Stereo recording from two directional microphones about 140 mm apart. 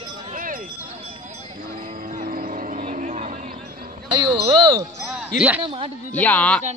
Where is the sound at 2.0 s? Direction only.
75° right (ahead or behind); by 3.4 s 55° right (ahead or behind).